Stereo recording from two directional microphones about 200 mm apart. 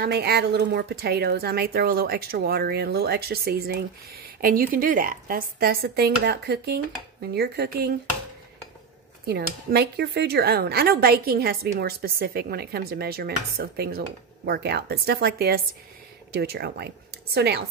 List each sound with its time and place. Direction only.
0.0 s speech: 50° right (ahead or behind)
9.2 s speech: 50° right (ahead or behind)